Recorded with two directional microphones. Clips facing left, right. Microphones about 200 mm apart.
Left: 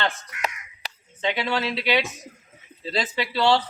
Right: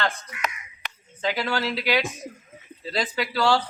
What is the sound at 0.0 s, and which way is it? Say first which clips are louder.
Crow: even; 30° left (ahead or behind).